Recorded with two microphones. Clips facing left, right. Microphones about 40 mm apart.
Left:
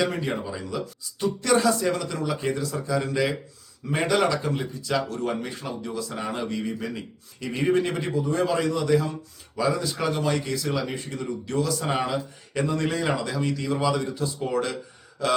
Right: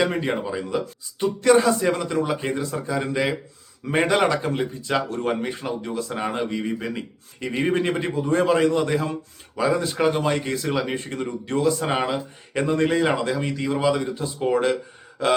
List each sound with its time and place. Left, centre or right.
0.0 s speech: right
3.8 s speech: right